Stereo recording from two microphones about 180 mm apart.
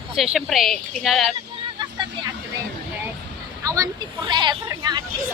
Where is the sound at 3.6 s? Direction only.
20° right (ahead or behind).